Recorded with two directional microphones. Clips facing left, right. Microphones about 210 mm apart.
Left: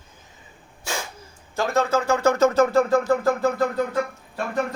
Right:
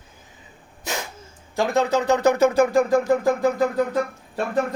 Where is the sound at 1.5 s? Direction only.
15° right (ahead or behind).